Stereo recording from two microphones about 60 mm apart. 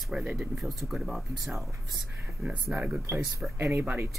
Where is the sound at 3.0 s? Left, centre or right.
Right.